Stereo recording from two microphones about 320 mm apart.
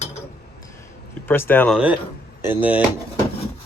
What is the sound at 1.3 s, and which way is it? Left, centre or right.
Speech, centre.